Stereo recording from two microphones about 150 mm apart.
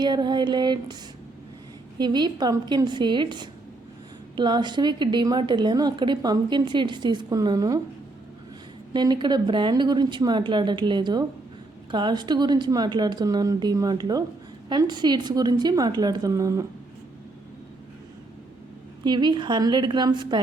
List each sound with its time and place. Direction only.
0.0 s a woman's voice: 30° right (ahead or behind)
2.0 s a woman's voice: 30° right (ahead or behind)
8.9 s a woman's voice: 30° right (ahead or behind)
19.0 s a woman's voice: 30° right (ahead or behind)